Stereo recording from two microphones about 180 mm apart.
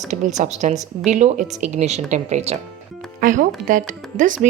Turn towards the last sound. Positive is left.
turn(degrees=-45)  # may be behind; listen again after turning